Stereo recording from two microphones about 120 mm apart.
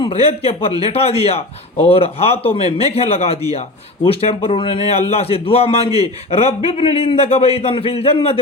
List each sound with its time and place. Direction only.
0.0 s a man's voice: 55° left (ahead or behind)